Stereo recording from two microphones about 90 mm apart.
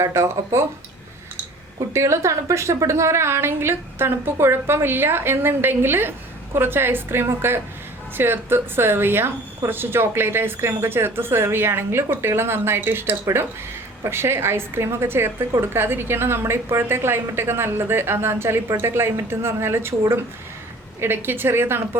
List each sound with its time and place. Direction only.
0.0 s speech: 30° right (ahead or behind)
1.9 s a woman's voice: 35° right (ahead or behind)